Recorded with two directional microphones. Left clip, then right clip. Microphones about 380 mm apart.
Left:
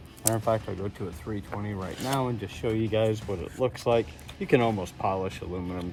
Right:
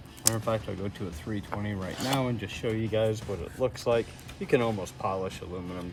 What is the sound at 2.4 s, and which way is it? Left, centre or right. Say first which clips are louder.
Speech: left 2 dB; centre.